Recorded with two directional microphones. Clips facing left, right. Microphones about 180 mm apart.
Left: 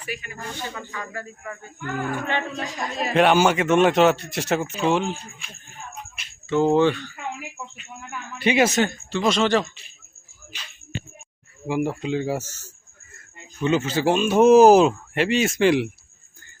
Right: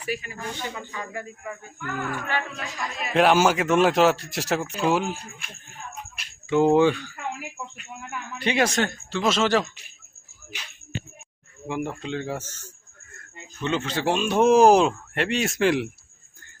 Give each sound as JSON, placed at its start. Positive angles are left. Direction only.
{"t": 0.1, "sound": "speech", "side_deg": -30}
{"t": 0.3, "sound": "speech", "side_deg": -15}
{"t": 1.8, "sound": "speech", "side_deg": 25}
{"t": 2.5, "sound": "speech", "side_deg": 35}
{"t": 3.1, "sound": "speech", "side_deg": 0}
{"t": 6.5, "sound": "speech", "side_deg": -15}
{"t": 11.6, "sound": "speech", "side_deg": 5}